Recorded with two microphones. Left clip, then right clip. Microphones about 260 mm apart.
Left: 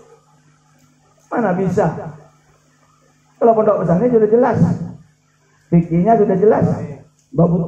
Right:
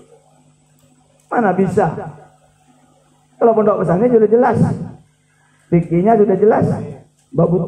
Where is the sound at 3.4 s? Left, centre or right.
Right.